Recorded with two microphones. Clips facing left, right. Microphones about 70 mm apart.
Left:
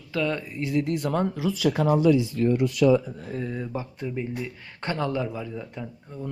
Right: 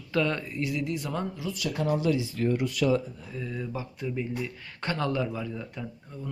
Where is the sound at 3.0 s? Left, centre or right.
Left.